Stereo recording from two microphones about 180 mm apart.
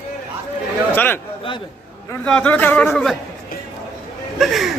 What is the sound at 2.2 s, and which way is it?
Speech, 5° left (ahead or behind).